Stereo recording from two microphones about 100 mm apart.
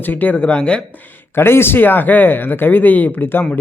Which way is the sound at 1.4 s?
25° left (ahead or behind).